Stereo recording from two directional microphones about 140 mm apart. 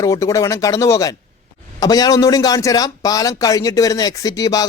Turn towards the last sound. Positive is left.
turn(degrees=25)  # may be behind; listen again after turning